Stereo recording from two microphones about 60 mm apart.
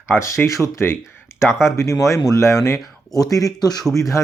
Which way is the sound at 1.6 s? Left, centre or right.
Left.